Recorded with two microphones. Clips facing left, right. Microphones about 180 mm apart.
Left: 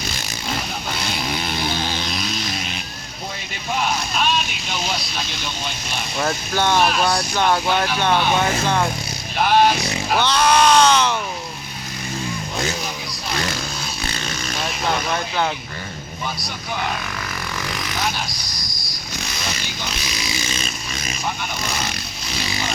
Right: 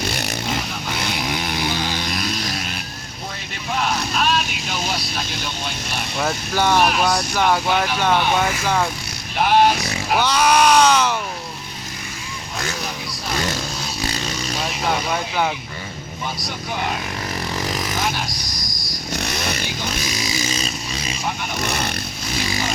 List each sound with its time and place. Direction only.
0.1 s vehicle: 65° right (ahead or behind)
0.9 s vehicle: 15° right (ahead or behind)
3.8 s vehicle: centre (ahead or behind)
6.1 s speech: 5° right (ahead or behind)
7.0 s speech: centre (ahead or behind)
9.4 s vehicle: 10° right (ahead or behind)
10.1 s speech: 10° right (ahead or behind)
14.0 s vehicle: 35° right (ahead or behind)
14.8 s speech: 10° right (ahead or behind)
17.6 s vehicle: 40° right (ahead or behind)
19.1 s motorcycle: 65° right (ahead or behind)
19.9 s a sound: 45° right (ahead or behind)
21.6 s vehicle: 60° right (ahead or behind)